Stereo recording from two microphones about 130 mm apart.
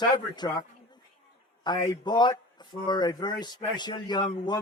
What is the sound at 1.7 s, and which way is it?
A man's voice, 35° left (ahead or behind).